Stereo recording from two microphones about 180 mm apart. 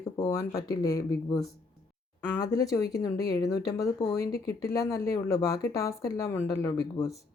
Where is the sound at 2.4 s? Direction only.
20° left (ahead or behind).